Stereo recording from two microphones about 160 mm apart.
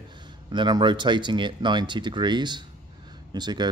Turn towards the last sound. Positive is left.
turn(degrees=-25)  # may be behind; listen again after turning